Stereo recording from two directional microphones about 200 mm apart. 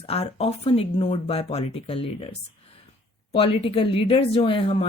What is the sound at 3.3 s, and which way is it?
Speech, 30° left (ahead or behind).